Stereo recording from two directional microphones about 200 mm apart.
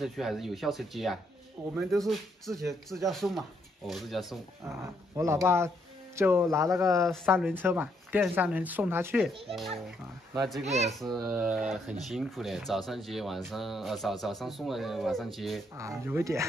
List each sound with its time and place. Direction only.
0.0 s speech: centre (ahead or behind)
4.6 s speech: 15° right (ahead or behind)
10.6 s a child's voice: 35° right (ahead or behind)
11.0 s speech: centre (ahead or behind)
15.7 s speech: 15° right (ahead or behind)